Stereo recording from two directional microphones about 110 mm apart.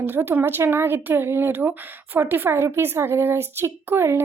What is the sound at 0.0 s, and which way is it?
A woman's voice, 20° right (ahead or behind).